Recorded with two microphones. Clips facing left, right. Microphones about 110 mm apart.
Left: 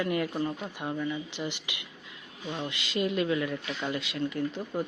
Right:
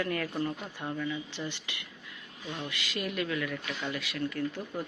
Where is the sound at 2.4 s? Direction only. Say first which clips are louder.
Left 3 dB; 25° left (ahead or behind).